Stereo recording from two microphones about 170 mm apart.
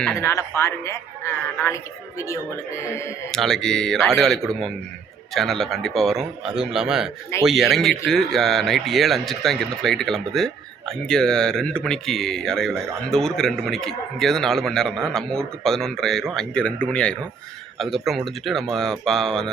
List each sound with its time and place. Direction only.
0.2 s a man's voice: 15° left (ahead or behind)
3.3 s a man's voice: 5° left (ahead or behind)